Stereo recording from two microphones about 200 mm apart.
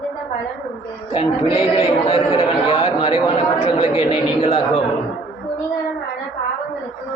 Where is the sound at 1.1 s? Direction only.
30° left (ahead or behind).